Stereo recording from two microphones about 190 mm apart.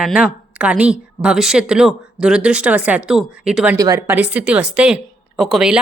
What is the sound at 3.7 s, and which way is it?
Speech, 20° right (ahead or behind).